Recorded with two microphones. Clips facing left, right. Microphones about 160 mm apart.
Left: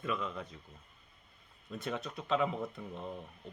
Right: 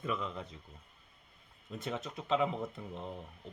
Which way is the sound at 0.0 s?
25° right (ahead or behind).